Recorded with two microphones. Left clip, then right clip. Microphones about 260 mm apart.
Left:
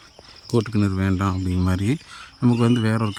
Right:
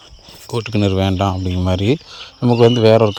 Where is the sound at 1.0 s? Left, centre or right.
Centre.